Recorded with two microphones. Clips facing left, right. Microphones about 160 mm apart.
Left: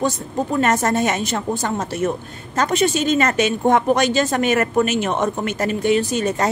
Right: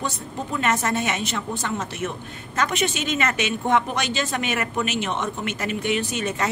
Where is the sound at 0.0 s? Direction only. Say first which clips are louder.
Left 8 dB; 40° left (ahead or behind).